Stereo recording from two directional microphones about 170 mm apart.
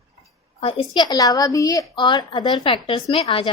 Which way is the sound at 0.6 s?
30° left (ahead or behind).